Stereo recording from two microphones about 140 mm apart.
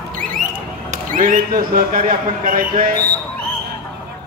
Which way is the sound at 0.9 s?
70° right (ahead or behind).